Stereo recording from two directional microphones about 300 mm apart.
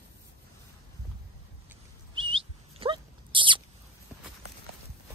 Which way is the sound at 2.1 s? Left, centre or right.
Centre.